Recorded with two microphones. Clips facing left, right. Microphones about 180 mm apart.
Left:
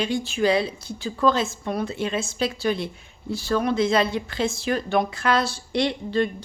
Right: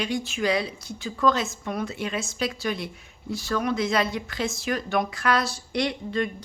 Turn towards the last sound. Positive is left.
turn(degrees=30)  # may be behind; listen again after turning